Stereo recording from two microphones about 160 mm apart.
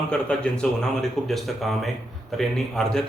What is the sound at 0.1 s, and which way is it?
Speech, 5° left (ahead or behind).